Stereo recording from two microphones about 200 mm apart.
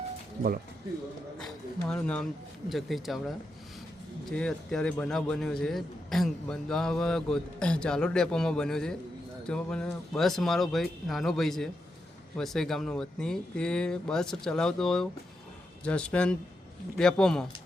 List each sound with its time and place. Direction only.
1.4 s speech: 5° left (ahead or behind)